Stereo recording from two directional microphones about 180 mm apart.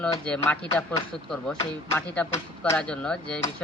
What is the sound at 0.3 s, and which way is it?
Speech, 5° left (ahead or behind).